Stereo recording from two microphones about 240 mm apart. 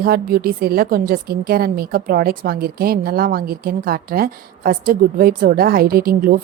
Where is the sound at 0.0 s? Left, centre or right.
Right.